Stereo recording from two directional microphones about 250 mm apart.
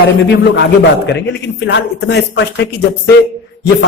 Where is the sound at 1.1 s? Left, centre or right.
Left.